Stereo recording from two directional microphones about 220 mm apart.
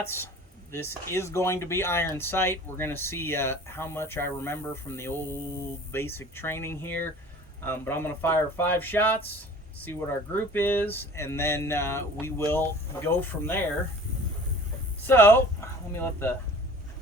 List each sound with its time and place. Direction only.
0.7 s speech: 10° left (ahead or behind)
15.0 s speech: 10° left (ahead or behind)